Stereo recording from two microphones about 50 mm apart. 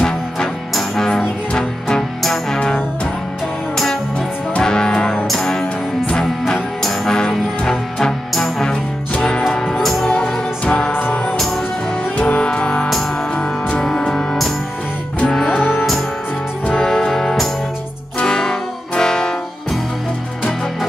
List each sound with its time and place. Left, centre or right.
0.0 s music: centre
3.7 s music: centre
9.7 s music: centre
10.0 s music: centre
10.9 s music: left
12.4 s music: left
16.6 s music: centre